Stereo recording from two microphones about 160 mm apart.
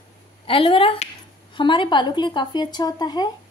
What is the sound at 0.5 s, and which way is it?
A woman's voice, 35° left (ahead or behind).